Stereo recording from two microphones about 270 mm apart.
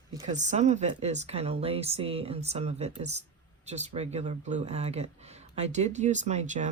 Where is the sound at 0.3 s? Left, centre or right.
Right.